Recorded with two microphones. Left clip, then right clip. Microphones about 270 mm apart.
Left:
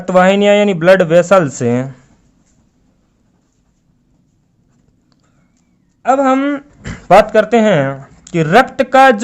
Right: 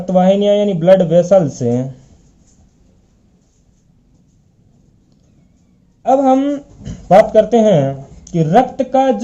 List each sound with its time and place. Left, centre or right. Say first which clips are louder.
0.1 s speech: left 3 dB; left
6.0 s a sound: even; left
7.3 s speech: even; left